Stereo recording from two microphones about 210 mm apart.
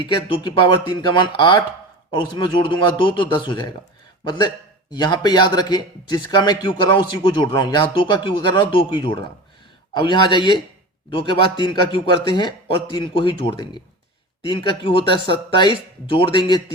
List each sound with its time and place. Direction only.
0.1 s a man's voice: 20° left (ahead or behind)